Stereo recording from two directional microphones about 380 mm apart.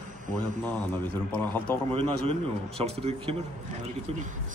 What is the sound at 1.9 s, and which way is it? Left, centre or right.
A man's voice, centre.